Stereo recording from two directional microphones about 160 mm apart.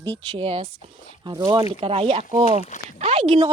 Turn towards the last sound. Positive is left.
turn(degrees=-40)  # may be behind; listen again after turning